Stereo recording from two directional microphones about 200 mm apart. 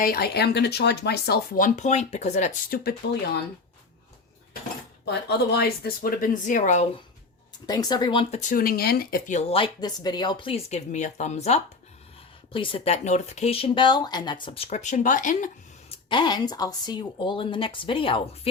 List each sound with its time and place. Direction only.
0.0 s speech: 50° left (ahead or behind)
5.0 s speech: 55° left (ahead or behind); by 6.8 s 40° left (ahead or behind)
7.7 s speech: 20° left (ahead or behind); by 15.4 s 40° left (ahead or behind)
16.0 s speech: 25° left (ahead or behind)